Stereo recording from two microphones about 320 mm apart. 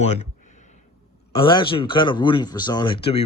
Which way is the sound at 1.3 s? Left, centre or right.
Centre.